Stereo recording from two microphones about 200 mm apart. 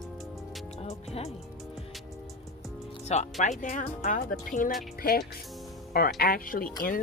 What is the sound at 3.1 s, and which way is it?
Speech, 35° left (ahead or behind).